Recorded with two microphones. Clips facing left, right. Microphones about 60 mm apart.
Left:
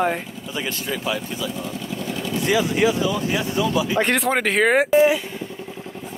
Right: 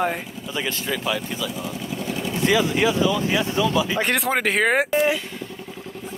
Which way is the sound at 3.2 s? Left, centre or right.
Right.